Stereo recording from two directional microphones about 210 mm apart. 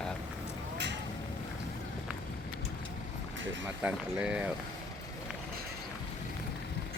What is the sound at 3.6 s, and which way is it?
Speech, 5° right (ahead or behind).